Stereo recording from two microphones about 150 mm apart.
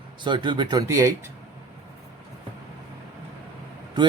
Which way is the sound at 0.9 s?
20° right (ahead or behind).